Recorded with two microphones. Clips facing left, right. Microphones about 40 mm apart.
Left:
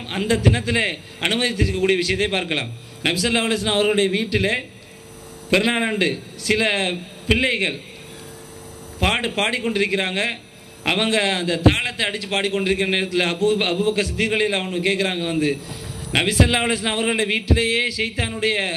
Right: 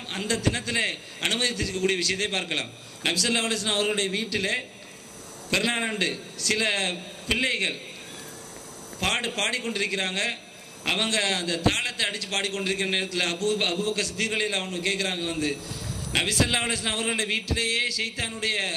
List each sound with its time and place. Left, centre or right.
0.0 s a man's voice: left
9.0 s a man's voice: left